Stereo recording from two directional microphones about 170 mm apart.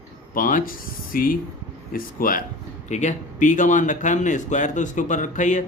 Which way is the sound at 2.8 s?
45° left (ahead or behind).